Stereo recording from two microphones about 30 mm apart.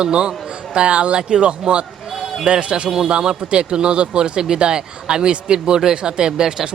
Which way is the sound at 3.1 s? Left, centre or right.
Right.